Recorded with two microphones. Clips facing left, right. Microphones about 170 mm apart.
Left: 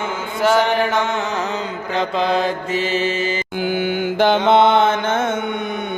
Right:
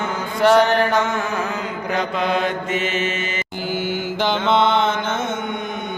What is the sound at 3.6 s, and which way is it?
Mantra, 55° left (ahead or behind).